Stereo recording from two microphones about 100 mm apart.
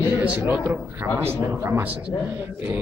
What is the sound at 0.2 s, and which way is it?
A man's voice, 15° right (ahead or behind).